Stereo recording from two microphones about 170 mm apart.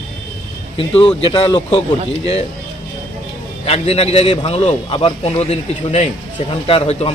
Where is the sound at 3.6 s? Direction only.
35° left (ahead or behind).